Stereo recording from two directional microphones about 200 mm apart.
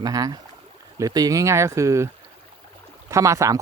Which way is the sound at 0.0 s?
20° right (ahead or behind).